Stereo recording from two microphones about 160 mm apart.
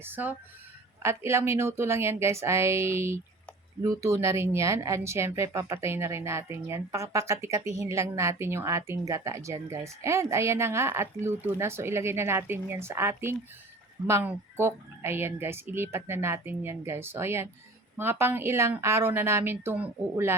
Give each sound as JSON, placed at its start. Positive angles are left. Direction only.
{"t": 0.0, "sound": "speech", "side_deg": -10}